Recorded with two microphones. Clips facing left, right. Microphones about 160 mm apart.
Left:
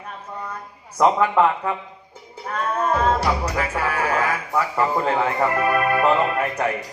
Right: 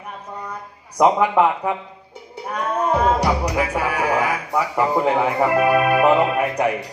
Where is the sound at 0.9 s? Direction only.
15° right (ahead or behind).